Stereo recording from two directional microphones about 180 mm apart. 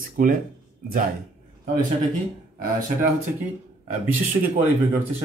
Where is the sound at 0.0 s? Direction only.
50° right (ahead or behind).